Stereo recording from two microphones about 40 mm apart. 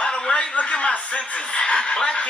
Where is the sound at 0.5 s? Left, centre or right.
Left.